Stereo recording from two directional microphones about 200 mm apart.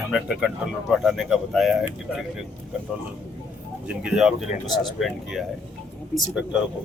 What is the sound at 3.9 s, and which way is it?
Speech, 5° right (ahead or behind).